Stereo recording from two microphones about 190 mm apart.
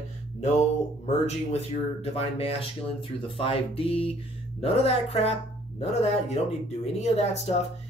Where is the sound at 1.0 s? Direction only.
35° left (ahead or behind).